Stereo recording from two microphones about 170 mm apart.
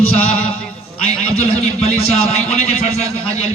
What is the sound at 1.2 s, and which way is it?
Speech, 40° left (ahead or behind).